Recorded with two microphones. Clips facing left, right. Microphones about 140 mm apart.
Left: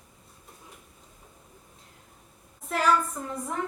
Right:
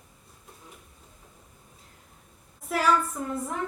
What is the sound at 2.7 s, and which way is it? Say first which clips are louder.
Speech: even; 5° right (ahead or behind).